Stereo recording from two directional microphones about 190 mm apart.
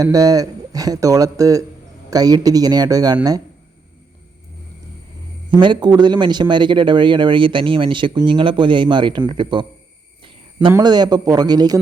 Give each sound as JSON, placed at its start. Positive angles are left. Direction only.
{"t": 0.0, "sound": "a man's voice", "side_deg": -20}
{"t": 5.5, "sound": "a man's voice", "side_deg": -25}
{"t": 10.7, "sound": "a man's voice", "side_deg": -20}